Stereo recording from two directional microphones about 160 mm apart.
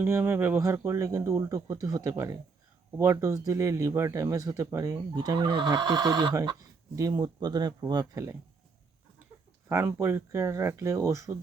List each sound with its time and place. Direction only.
0.0 s speech: 15° right (ahead or behind)
9.6 s speech: 15° right (ahead or behind)